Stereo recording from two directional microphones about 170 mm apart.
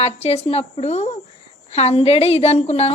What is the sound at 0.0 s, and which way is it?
A woman's voice, 40° left (ahead or behind).